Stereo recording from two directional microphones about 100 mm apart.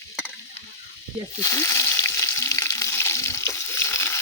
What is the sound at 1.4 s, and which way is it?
Frying, 30° left (ahead or behind).